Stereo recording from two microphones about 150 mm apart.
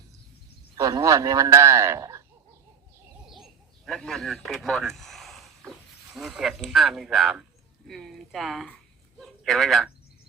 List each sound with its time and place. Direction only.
0.8 s a man's voice: 25° right (ahead or behind)
3.2 s owl: centre (ahead or behind)
6.1 s a man's voice: centre (ahead or behind)